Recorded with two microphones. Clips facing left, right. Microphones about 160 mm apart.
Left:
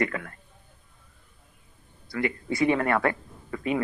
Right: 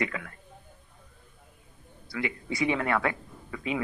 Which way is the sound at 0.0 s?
50° left (ahead or behind).